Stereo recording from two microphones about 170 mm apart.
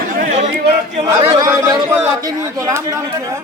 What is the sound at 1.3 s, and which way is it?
Speech, 20° right (ahead or behind).